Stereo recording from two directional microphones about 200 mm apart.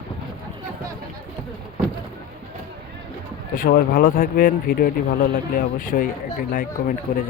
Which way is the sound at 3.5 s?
45° left (ahead or behind).